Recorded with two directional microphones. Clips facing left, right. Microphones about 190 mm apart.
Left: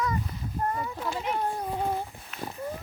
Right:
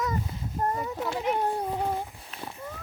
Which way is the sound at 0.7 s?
25° right (ahead or behind).